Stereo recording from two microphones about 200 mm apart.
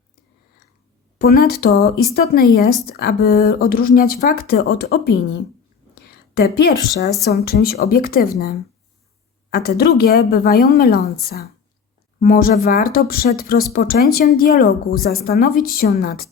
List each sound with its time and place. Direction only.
1.2 s speech: 50° left (ahead or behind)
6.1 s a sound: 50° left (ahead or behind)
7.3 s speech: 50° left (ahead or behind)